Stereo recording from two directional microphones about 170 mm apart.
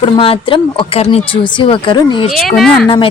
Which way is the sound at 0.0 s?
30° left (ahead or behind).